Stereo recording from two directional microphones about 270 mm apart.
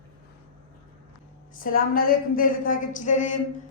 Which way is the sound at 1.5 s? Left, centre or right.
Left.